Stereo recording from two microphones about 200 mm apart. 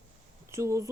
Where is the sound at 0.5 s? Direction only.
15° right (ahead or behind).